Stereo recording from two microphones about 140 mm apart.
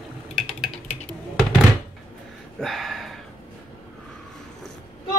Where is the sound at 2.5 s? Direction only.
Centre (ahead or behind).